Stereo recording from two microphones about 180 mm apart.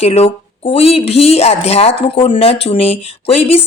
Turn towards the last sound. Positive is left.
turn(degrees=30)  # may be behind; listen again after turning